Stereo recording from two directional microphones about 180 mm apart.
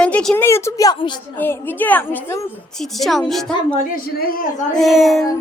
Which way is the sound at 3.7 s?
50° left (ahead or behind).